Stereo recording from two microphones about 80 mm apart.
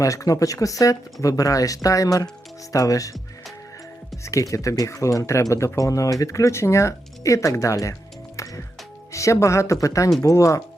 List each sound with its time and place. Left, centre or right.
0.0 s speech: left
4.2 s speech: left
8.4 s music: left
9.1 s speech: left